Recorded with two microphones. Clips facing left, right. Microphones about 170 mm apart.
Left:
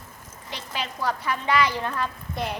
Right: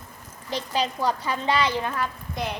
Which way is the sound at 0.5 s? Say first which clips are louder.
Right 7 dB; 35° right (ahead or behind).